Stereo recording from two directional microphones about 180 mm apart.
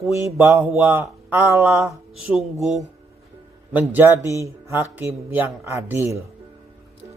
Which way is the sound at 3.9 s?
15° right (ahead or behind).